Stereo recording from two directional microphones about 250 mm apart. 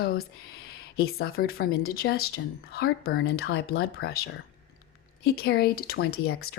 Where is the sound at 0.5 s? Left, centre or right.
Left.